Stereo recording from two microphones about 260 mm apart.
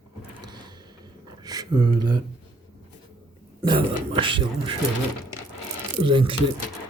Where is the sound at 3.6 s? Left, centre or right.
Centre.